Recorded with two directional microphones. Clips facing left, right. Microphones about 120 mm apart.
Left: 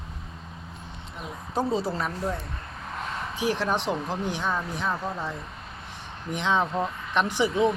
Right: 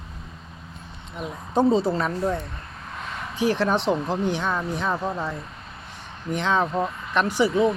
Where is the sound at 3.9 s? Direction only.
15° right (ahead or behind).